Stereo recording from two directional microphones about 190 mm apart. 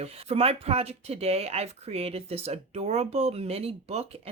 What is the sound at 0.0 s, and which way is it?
Speech, 30° right (ahead or behind).